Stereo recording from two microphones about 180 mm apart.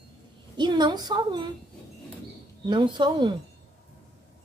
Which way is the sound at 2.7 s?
25° right (ahead or behind).